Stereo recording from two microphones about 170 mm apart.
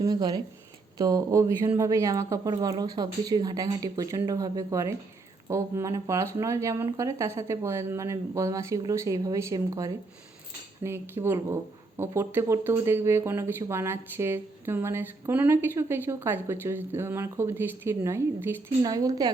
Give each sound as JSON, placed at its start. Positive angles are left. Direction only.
{"t": 0.0, "sound": "speech", "side_deg": -20}